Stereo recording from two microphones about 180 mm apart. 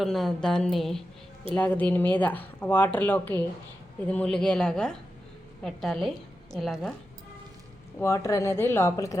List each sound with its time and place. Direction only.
0.0 s speech: centre (ahead or behind)
7.9 s speech: 15° left (ahead or behind)